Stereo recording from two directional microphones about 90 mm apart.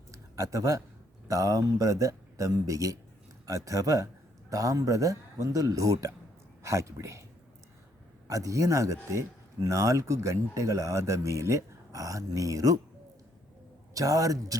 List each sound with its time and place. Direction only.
0.1 s a sound: 40° right (ahead or behind)
1.3 s a man's voice: 40° right (ahead or behind)
8.3 s speech: 35° right (ahead or behind)
13.9 s speech: 40° right (ahead or behind)